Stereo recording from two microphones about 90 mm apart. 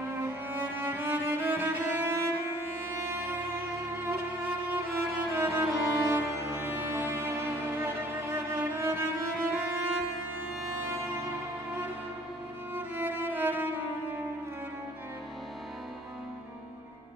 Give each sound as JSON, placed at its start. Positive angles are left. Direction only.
{"t": 0.5, "sound": "music", "side_deg": -20}
{"t": 5.3, "sound": "music", "side_deg": -30}
{"t": 12.7, "sound": "music", "side_deg": -20}